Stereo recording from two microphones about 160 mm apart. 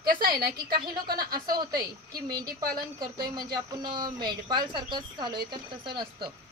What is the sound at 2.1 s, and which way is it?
Speech, 25° right (ahead or behind).